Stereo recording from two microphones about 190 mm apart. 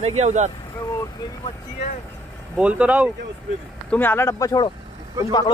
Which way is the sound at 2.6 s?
5° right (ahead or behind).